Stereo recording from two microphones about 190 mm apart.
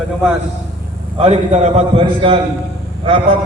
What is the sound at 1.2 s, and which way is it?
A man's voice, 35° right (ahead or behind).